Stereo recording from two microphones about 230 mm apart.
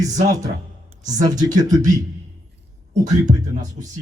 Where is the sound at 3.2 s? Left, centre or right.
Right.